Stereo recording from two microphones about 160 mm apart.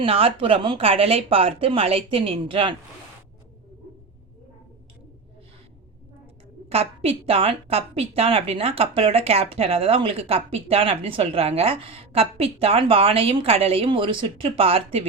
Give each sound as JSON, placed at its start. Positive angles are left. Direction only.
{"t": 0.0, "sound": "a woman's voice", "side_deg": -35}
{"t": 6.7, "sound": "a woman's voice", "side_deg": -40}